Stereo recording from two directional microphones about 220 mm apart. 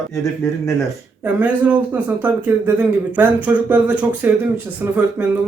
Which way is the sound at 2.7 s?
5° right (ahead or behind).